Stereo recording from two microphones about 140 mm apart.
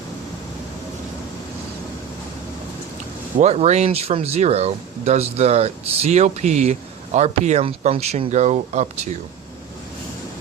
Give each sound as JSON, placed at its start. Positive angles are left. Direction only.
{"t": 3.3, "sound": "speech", "side_deg": -50}